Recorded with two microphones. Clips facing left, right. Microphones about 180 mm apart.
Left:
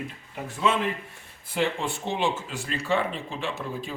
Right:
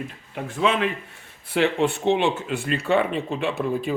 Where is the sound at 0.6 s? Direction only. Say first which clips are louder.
Right 3 dB; 70° right (ahead or behind).